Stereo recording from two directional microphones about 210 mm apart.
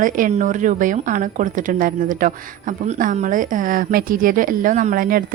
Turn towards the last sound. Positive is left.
turn(degrees=-40)  # may be behind; listen again after turning